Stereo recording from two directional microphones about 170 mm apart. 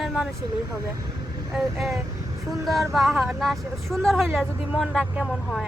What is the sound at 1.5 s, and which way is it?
Speech, centre (ahead or behind).